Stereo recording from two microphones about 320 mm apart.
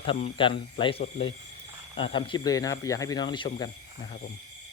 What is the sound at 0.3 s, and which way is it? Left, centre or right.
Speech, centre.